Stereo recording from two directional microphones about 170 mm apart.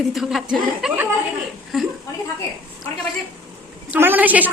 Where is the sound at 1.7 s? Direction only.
Centre (ahead or behind).